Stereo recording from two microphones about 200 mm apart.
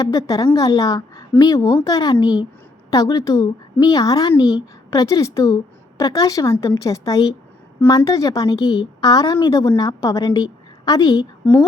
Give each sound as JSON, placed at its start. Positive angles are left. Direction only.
{"t": 0.0, "sound": "a woman's voice", "side_deg": 15}